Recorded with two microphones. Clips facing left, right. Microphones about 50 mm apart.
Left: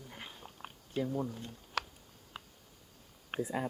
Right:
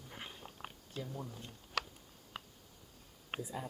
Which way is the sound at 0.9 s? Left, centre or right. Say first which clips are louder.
Left 10 dB; left.